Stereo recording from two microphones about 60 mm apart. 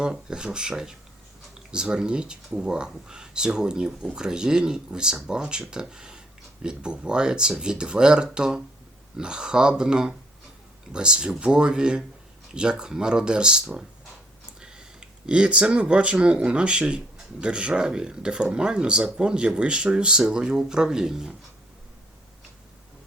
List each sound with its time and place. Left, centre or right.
0.0 s speech: centre